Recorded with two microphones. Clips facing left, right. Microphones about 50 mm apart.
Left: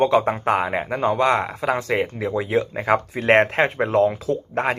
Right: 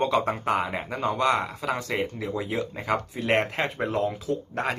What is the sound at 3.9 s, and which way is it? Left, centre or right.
Speech, left.